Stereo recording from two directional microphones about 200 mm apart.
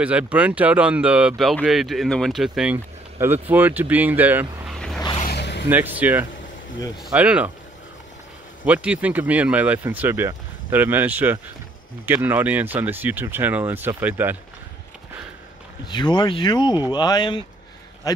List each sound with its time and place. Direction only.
0.0 s speech: 5° right (ahead or behind)
4.6 s vehicle: centre (ahead or behind)
5.3 s a sound: 55° left (ahead or behind)
5.7 s speech: 10° right (ahead or behind)
8.6 s speech: 5° right (ahead or behind)
15.9 s speech: 20° left (ahead or behind)